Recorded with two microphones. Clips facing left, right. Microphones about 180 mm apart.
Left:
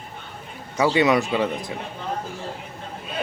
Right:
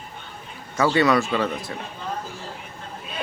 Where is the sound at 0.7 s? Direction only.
15° left (ahead or behind).